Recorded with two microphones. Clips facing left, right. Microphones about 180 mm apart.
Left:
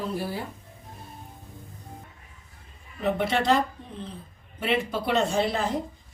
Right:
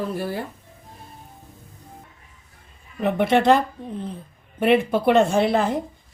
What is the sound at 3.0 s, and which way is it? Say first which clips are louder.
Speech: right 6 dB; 55° right (ahead or behind).